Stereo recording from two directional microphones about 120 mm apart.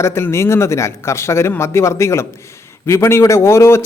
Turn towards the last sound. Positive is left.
turn(degrees=20)  # may be behind; listen again after turning